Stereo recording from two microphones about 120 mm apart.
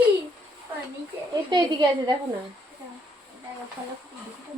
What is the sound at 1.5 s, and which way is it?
Speech, 35° right (ahead or behind).